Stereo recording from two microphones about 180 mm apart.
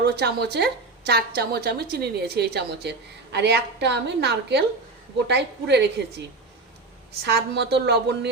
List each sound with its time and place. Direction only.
0.0 s a woman's voice: 65° right (ahead or behind)
7.3 s a woman's voice: 65° right (ahead or behind)